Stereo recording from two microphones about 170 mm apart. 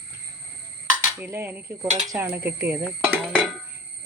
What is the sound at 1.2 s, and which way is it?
Speech, 15° right (ahead or behind).